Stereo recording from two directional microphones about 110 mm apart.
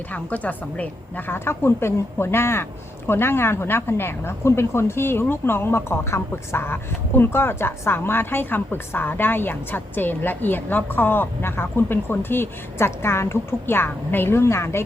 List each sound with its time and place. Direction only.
0.1 s a woman's voice: 15° left (ahead or behind)